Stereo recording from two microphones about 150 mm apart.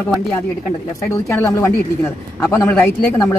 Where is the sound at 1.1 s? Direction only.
20° left (ahead or behind).